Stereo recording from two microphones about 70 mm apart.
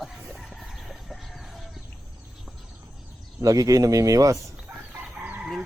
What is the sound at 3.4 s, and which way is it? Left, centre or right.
Speech, right.